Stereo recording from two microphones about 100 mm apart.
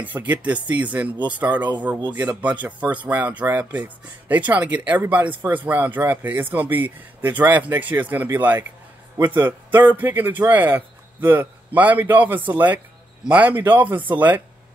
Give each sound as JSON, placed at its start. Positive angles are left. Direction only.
{"t": 0.0, "sound": "a man's voice", "side_deg": -15}